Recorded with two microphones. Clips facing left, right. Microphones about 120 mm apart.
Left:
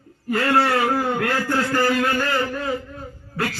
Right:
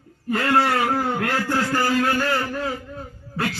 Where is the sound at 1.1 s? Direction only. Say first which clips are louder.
Left 1 dB; 15° right (ahead or behind).